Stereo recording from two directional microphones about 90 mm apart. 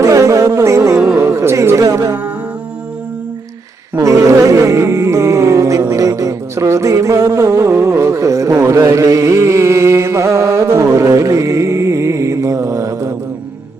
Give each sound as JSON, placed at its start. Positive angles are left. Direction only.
{"t": 0.0, "sound": "insect", "side_deg": -35}
{"t": 0.9, "sound": "a sound", "side_deg": -5}
{"t": 1.2, "sound": "music", "side_deg": -30}
{"t": 3.9, "sound": "music", "side_deg": -35}